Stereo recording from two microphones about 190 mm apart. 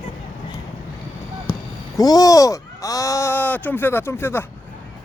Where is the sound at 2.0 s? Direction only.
20° left (ahead or behind).